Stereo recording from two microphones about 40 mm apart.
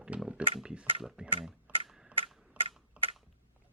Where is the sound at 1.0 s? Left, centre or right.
Centre.